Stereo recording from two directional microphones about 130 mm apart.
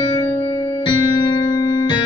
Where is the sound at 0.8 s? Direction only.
35° left (ahead or behind).